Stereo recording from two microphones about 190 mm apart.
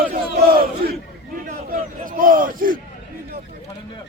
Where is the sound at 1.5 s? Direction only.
45° right (ahead or behind).